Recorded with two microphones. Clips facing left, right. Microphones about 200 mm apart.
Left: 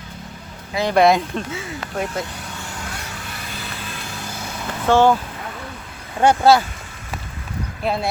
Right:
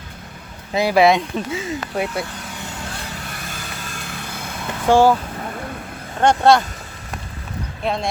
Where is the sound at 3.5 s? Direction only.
45° right (ahead or behind).